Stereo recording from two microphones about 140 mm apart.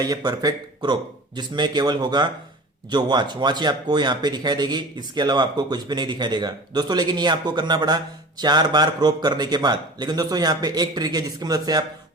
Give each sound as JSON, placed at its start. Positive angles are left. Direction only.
{"t": 0.0, "sound": "speech", "side_deg": -30}